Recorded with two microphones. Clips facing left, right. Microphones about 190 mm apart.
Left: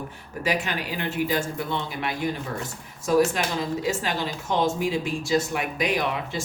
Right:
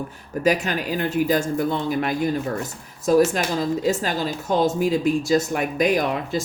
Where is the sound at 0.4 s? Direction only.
45° right (ahead or behind).